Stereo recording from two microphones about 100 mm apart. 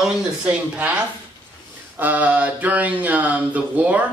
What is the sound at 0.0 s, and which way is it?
Speech, 10° right (ahead or behind).